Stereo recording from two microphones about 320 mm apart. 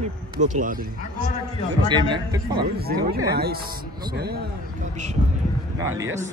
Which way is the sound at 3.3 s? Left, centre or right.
Right.